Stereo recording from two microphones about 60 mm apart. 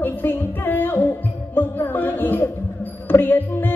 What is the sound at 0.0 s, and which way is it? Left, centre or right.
Music, left.